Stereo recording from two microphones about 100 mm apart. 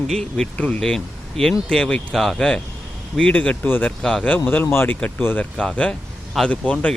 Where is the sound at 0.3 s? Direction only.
10° left (ahead or behind).